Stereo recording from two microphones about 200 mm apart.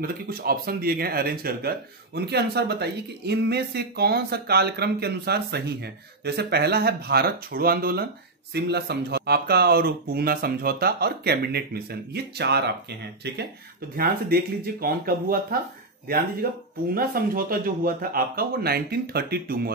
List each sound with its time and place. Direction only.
0.0 s speech: 50° right (ahead or behind)
13.9 s speech: 50° right (ahead or behind)
16.4 s speech: 50° right (ahead or behind)